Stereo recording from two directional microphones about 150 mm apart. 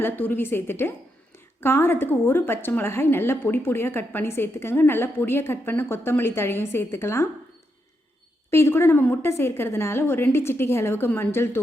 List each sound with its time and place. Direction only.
0.0 s a woman's voice: 15° left (ahead or behind)
8.4 s a woman's voice: 15° left (ahead or behind)